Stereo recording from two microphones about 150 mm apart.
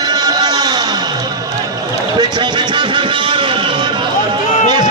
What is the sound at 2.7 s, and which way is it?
Vehicle, 30° right (ahead or behind).